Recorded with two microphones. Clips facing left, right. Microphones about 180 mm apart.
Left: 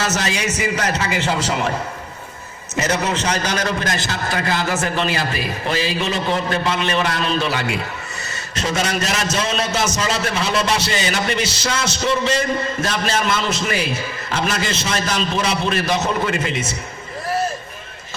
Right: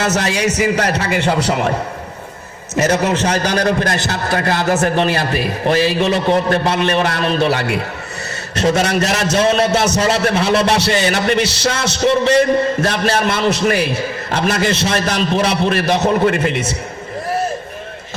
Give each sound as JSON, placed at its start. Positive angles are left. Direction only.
{"t": 0.0, "sound": "a man's voice", "side_deg": -55}
{"t": 2.7, "sound": "a man's voice", "side_deg": -55}
{"t": 3.3, "sound": "a man's voice", "side_deg": -35}
{"t": 3.7, "sound": "a man's voice", "side_deg": -50}